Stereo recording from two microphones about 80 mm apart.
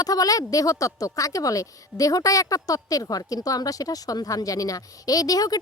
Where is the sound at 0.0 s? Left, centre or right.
Left.